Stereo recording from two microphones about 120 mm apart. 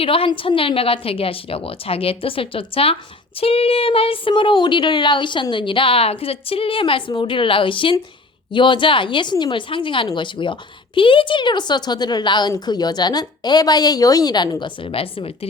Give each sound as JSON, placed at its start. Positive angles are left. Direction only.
{"t": 0.0, "sound": "speech", "side_deg": 50}